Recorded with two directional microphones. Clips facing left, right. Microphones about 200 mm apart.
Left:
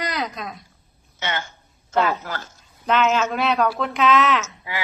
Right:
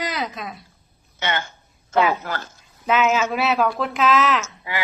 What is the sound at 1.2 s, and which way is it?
A man's voice, 55° right (ahead or behind).